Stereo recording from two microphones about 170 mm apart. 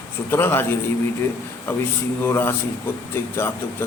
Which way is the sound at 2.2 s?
15° left (ahead or behind).